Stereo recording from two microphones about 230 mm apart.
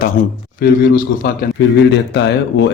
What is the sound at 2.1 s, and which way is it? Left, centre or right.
Speech, left.